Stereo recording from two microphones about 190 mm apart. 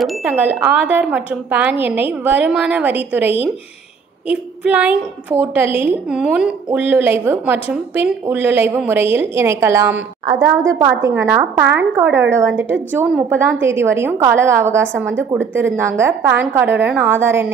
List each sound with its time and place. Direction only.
0.0 s a woman's voice: 5° right (ahead or behind)